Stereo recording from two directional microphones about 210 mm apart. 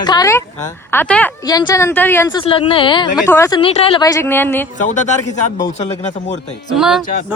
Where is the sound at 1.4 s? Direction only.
20° left (ahead or behind).